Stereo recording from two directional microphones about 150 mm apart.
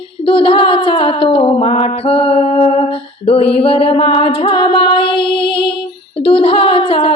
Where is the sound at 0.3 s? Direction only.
35° left (ahead or behind).